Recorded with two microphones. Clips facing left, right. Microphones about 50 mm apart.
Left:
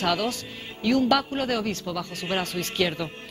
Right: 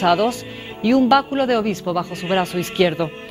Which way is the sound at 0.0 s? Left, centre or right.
Centre.